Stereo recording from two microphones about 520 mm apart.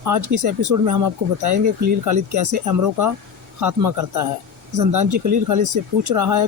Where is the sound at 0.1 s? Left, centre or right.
Right.